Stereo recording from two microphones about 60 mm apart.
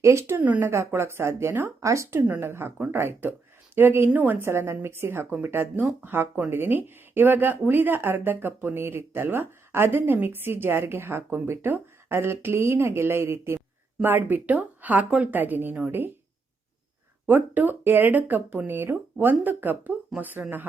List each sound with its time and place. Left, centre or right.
0.0 s a woman's voice: right
0.3 s speech: right
0.6 s a woman's voice: right
1.8 s speech: right
2.4 s a woman's voice: right
17.2 s speech: right